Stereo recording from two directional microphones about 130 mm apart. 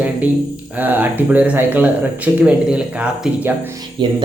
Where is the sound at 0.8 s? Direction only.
15° right (ahead or behind).